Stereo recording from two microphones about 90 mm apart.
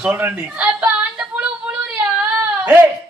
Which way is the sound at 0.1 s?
20° right (ahead or behind).